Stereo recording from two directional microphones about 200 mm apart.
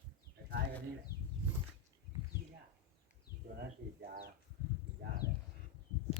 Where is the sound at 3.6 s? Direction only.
50° right (ahead or behind).